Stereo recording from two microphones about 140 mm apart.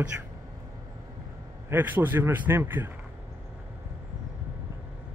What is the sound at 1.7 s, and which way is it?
A man's voice, 15° right (ahead or behind).